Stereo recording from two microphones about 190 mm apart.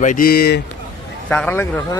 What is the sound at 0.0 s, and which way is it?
Speech, 45° left (ahead or behind).